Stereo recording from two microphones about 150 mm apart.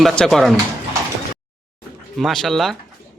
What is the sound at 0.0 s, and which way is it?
Speech, centre (ahead or behind).